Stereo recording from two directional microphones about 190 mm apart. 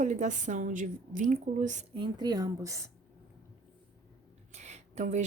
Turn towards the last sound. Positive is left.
turn(degrees=-40)  # may be behind; listen again after turning